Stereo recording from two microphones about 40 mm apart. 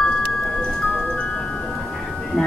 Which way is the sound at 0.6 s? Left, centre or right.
Centre.